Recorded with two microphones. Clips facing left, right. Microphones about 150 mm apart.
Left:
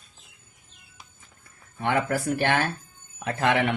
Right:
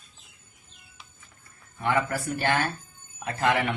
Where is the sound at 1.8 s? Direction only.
65° left (ahead or behind).